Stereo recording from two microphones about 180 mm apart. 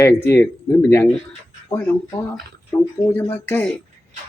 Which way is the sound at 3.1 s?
10° left (ahead or behind).